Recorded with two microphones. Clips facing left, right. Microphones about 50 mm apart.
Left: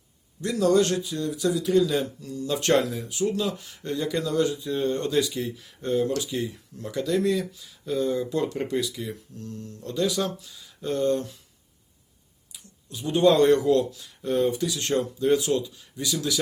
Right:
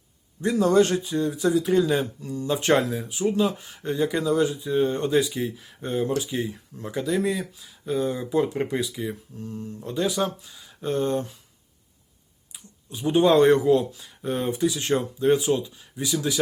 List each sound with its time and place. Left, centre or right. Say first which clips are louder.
0.4 s speech: right 2 dB; right
12.9 s speech: right 1 dB; right